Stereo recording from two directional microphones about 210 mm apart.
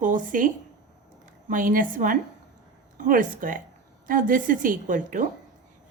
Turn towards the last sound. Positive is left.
turn(degrees=-40)  # may be behind; listen again after turning